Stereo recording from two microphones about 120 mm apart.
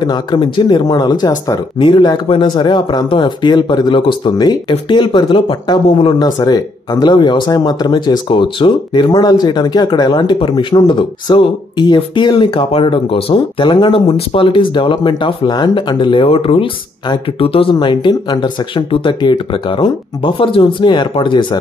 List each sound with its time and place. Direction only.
0.0 s speech: 40° left (ahead or behind)
9.1 s speech: 30° left (ahead or behind)